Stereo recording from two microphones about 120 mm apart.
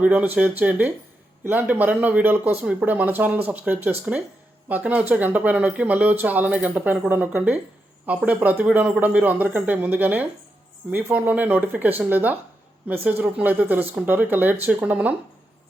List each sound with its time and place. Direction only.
0.0 s speech: 15° right (ahead or behind)